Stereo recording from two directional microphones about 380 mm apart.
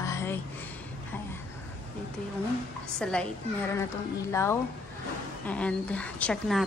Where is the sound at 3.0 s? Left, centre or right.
Centre.